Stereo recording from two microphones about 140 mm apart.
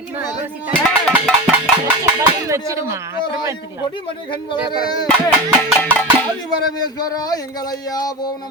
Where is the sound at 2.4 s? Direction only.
20° right (ahead or behind).